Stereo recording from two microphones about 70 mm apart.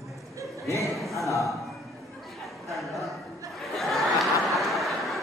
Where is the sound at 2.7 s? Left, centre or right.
Centre.